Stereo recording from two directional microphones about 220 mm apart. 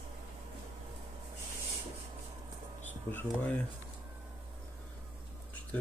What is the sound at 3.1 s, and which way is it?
Speech, 10° left (ahead or behind).